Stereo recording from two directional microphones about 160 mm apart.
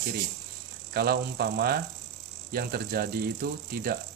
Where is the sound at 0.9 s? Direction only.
75° right (ahead or behind).